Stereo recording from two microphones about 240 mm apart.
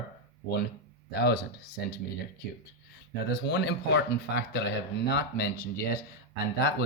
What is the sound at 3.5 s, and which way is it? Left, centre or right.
Speech, left.